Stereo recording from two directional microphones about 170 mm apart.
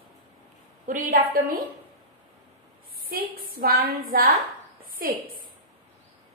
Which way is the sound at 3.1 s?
60° right (ahead or behind).